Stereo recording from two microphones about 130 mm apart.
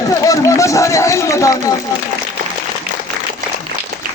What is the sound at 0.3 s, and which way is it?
Speech, 25° left (ahead or behind).